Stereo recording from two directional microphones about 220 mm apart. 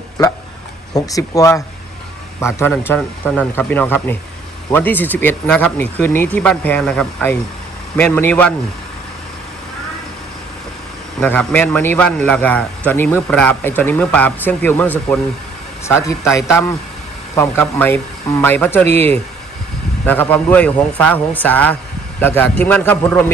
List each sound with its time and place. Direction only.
0.9 s a man's voice: 15° left (ahead or behind)
11.1 s a man's voice: 5° left (ahead or behind)
16.3 s a man's voice: 10° left (ahead or behind)